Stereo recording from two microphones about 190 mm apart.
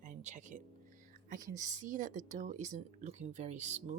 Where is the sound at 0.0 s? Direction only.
40° right (ahead or behind).